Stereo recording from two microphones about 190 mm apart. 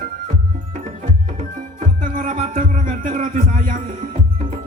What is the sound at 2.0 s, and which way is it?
Music, 45° right (ahead or behind).